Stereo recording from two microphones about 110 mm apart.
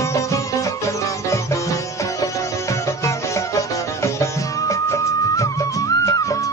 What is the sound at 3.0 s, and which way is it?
Music, 25° left (ahead or behind).